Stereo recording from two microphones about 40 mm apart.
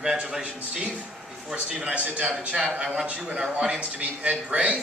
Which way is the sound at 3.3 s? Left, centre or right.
Centre.